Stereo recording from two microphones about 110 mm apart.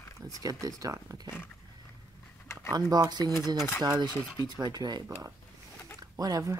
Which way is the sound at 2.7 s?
40° right (ahead or behind).